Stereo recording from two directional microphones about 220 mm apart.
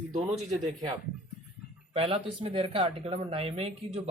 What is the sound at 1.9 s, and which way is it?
Speech, 25° right (ahead or behind).